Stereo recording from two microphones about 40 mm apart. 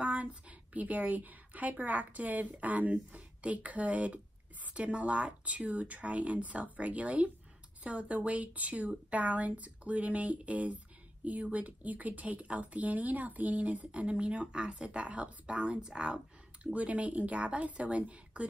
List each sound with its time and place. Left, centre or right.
0.0 s a woman's voice: right
16.7 s a woman's voice: right